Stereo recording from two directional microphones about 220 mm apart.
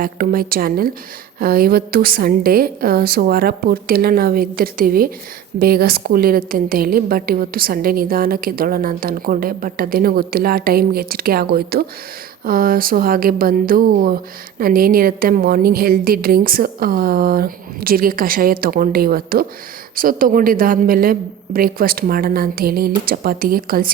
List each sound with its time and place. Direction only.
0.0 s a woman's voice: 40° right (ahead or behind)